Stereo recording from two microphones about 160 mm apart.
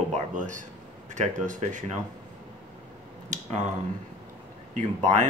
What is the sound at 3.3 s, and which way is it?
Speech, 50° right (ahead or behind).